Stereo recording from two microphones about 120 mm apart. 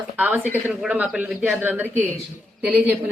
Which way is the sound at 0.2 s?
15° right (ahead or behind).